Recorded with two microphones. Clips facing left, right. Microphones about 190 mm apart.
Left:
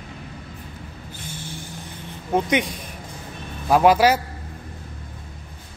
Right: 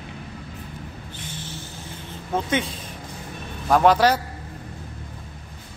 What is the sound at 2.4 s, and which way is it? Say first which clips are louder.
A man's voice: left 3 dB; 15° left (ahead or behind).